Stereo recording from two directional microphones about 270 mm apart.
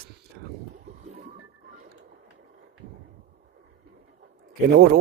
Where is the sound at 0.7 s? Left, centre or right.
Right.